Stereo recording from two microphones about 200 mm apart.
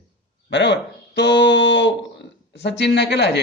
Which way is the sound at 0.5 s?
60° left (ahead or behind).